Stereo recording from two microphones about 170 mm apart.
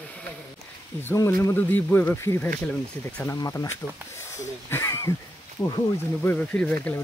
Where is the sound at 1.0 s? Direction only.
15° left (ahead or behind).